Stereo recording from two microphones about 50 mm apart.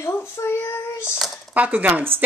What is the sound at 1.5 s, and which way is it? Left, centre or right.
Speech, right.